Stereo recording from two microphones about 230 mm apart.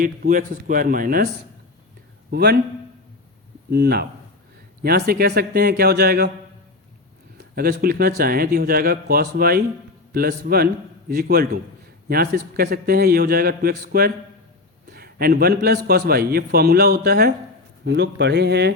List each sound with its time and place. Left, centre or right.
0.0 s speech: right
2.3 s a man's voice: right
3.7 s a man's voice: right
7.3 s a man's voice: right